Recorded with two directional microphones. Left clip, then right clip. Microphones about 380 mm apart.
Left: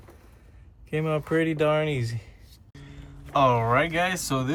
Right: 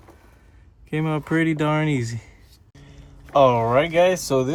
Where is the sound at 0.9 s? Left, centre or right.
Right.